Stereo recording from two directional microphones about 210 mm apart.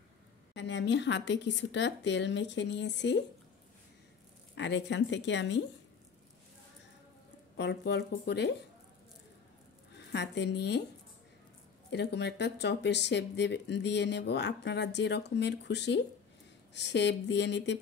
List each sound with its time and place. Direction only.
0.6 s speech: 55° left (ahead or behind)
4.6 s speech: 60° left (ahead or behind)
7.5 s speech: 55° left (ahead or behind)
9.9 s speech: 55° left (ahead or behind)
11.9 s speech: 55° left (ahead or behind)